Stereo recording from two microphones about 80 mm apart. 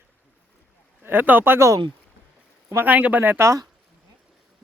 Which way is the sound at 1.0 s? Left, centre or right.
Right.